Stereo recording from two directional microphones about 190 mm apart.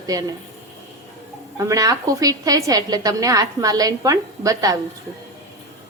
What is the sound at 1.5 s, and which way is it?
A woman's voice, 15° right (ahead or behind).